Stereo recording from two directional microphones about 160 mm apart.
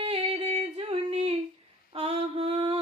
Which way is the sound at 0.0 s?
35° right (ahead or behind).